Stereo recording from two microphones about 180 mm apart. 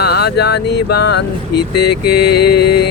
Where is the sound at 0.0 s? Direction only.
65° left (ahead or behind).